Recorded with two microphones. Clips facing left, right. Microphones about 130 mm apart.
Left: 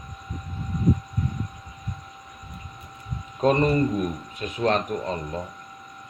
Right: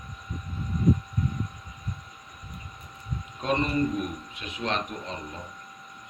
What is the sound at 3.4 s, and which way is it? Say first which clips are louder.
Speech: left 6 dB; 45° left (ahead or behind).